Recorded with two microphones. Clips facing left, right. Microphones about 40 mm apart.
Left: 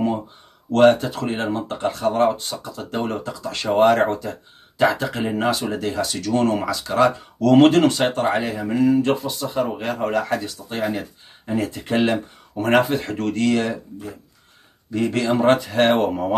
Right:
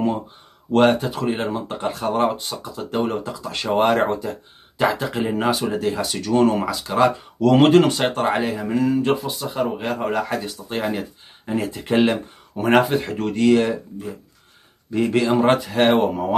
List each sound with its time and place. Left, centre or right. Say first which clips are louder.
0.8 s speech: left 3 dB; centre
3.3 s speech: even; right
5.0 s speech: even; centre
8.6 s speech: left 4 dB; centre
9.0 s speech: even; centre